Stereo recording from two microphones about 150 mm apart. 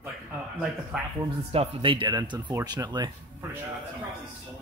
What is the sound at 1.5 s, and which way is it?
Speech, 40° right (ahead or behind).